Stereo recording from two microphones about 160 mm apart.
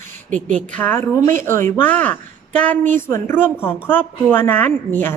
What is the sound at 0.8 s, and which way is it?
A woman's voice, 15° left (ahead or behind).